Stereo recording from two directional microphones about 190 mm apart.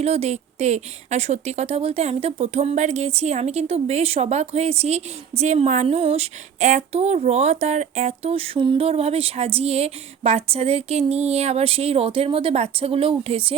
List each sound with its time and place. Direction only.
0.0 s speech: 35° right (ahead or behind)